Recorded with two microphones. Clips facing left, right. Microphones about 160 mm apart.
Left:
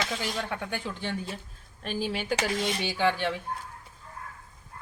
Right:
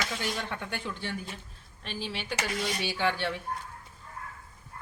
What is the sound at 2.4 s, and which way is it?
Music, 20° left (ahead or behind).